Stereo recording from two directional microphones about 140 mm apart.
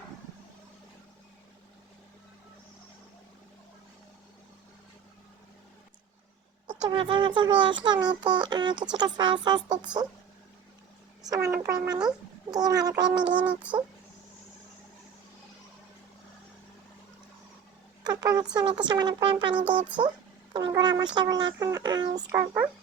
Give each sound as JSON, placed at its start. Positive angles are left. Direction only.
{"t": 6.7, "sound": "a child's voice", "side_deg": -35}
{"t": 11.2, "sound": "a child's voice", "side_deg": -25}
{"t": 13.4, "sound": "speech", "side_deg": -10}
{"t": 18.0, "sound": "a sound", "side_deg": -30}
{"t": 18.5, "sound": "a child's voice", "side_deg": -35}
{"t": 22.3, "sound": "speech", "side_deg": -15}